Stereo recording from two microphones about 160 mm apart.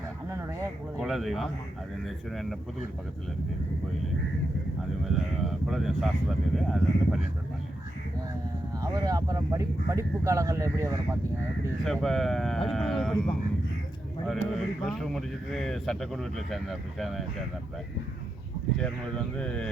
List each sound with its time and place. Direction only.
0.9 s speech: centre (ahead or behind)
5.0 s speech: centre (ahead or behind)
8.8 s speech: 20° right (ahead or behind)
12.0 s speech: centre (ahead or behind)
18.8 s speech: 5° left (ahead or behind)